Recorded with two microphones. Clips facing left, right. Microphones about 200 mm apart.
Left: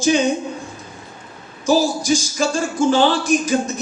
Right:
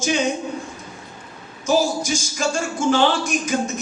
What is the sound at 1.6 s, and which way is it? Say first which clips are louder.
Speech: left 2 dB; 35° left (ahead or behind).